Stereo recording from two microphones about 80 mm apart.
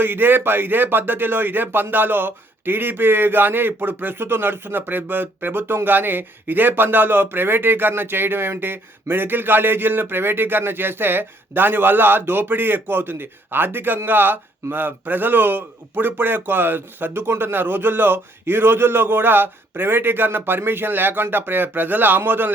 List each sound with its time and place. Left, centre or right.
0.0 s speech: right